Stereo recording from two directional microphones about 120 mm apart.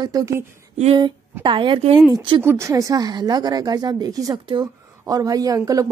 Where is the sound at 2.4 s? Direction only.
20° right (ahead or behind).